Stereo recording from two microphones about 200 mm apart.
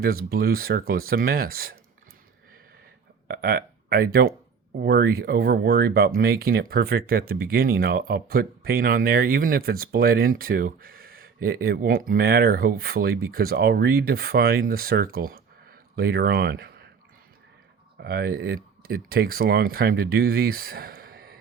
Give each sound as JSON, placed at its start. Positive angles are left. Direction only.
{"t": 0.0, "sound": "speech", "side_deg": -50}
{"t": 3.2, "sound": "speech", "side_deg": -50}
{"t": 18.0, "sound": "speech", "side_deg": -50}